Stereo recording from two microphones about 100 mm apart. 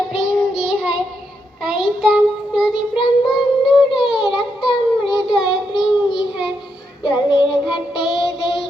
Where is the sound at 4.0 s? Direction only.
5° right (ahead or behind).